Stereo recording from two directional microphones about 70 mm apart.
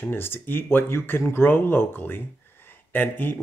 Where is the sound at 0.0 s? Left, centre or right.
Left.